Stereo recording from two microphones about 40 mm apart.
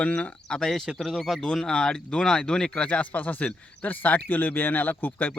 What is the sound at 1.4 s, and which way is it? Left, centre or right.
Speech, centre.